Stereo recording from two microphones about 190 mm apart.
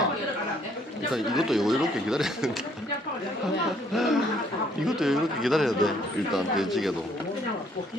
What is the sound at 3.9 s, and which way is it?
Speech, centre (ahead or behind).